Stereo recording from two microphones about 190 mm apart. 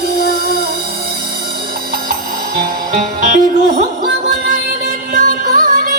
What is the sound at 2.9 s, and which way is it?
Music, 40° right (ahead or behind).